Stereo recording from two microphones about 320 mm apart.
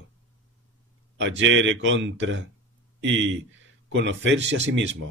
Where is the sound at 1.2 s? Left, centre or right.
Right.